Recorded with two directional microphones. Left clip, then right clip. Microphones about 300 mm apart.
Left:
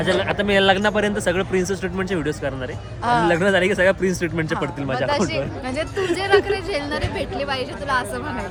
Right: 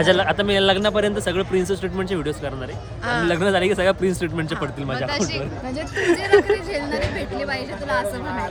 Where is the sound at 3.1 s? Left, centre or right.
Centre.